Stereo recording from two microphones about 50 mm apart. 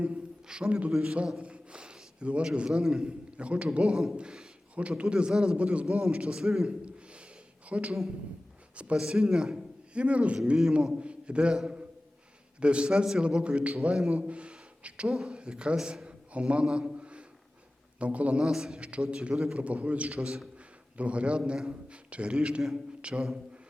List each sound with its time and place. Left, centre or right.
0.4 s a man's voice: centre
0.7 s a man's voice: right
6.4 s a man's voice: centre
6.8 s a sound: right
7.7 s a man's voice: right
8.7 s a sound: right
9.0 s a man's voice: centre; by 14.0 s right
14.1 s a sound: right
15.0 s a man's voice: centre; by 18.4 s right
18.4 s a man's voice: centre
18.9 s a man's voice: right
19.3 s a man's voice: centre
19.5 s a man's voice: right
20.1 s a man's voice: centre